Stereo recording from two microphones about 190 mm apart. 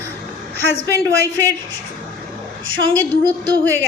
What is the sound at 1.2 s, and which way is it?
Speech, 10° left (ahead or behind).